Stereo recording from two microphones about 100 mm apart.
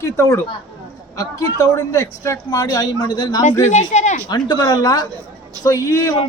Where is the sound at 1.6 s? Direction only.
30° left (ahead or behind).